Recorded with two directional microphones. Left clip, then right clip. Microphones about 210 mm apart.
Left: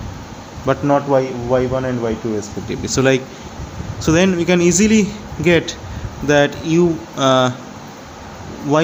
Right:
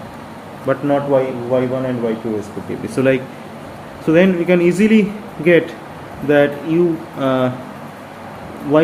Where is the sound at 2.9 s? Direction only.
45° left (ahead or behind).